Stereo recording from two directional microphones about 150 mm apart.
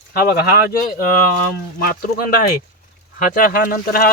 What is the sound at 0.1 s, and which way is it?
Speech, 90° left.